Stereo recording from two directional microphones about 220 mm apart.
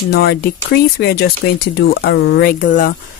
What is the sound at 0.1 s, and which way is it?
Speech, 45° left (ahead or behind).